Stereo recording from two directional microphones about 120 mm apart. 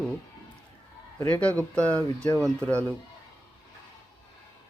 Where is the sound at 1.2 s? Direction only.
15° left (ahead or behind).